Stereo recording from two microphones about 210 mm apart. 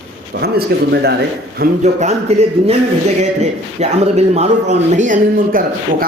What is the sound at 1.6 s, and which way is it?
A man's voice, 35° right (ahead or behind).